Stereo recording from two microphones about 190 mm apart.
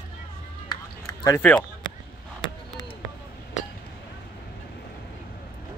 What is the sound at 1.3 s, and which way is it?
Speech, 10° left (ahead or behind).